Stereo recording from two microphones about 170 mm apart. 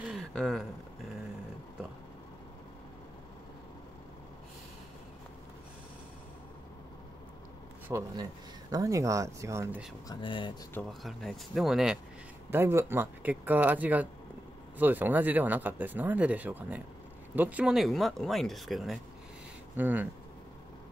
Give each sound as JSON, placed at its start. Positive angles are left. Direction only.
{"t": 0.1, "sound": "speech", "side_deg": 0}
{"t": 7.9, "sound": "speech", "side_deg": -15}
{"t": 10.0, "sound": "speech", "side_deg": 30}
{"t": 10.7, "sound": "speech", "side_deg": 5}
{"t": 12.4, "sound": "speech", "side_deg": -15}
{"t": 19.8, "sound": "speech", "side_deg": -10}